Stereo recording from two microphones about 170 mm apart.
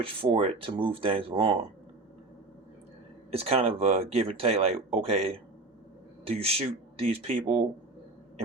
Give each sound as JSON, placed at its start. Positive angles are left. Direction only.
{"t": 0.0, "sound": "speech", "side_deg": -30}
{"t": 3.3, "sound": "speech", "side_deg": -35}